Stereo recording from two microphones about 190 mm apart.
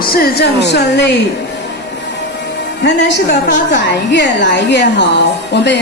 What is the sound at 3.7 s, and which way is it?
A woman's voice, 65° left (ahead or behind).